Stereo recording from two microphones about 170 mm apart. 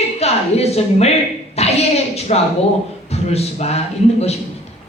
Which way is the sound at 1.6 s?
40° left (ahead or behind).